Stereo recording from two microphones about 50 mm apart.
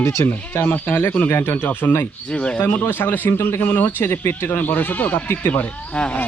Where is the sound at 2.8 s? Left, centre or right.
Left.